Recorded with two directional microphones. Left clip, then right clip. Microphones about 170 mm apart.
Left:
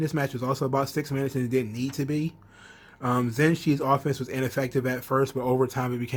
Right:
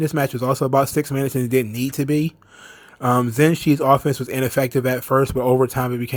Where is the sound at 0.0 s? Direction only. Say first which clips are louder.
Right 7 dB; 45° right (ahead or behind).